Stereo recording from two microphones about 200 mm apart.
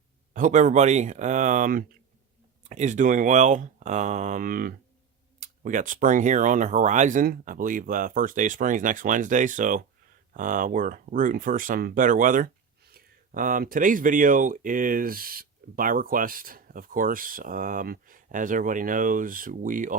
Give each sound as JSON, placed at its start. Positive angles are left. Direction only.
{"t": 0.3, "sound": "speech", "side_deg": -40}